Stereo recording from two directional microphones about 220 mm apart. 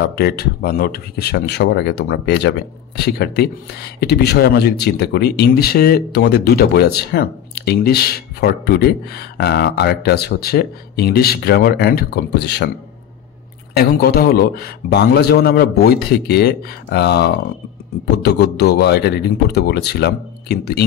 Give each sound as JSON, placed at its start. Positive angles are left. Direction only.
{"t": 0.1, "sound": "speech", "side_deg": 45}
{"t": 13.7, "sound": "speech", "side_deg": 45}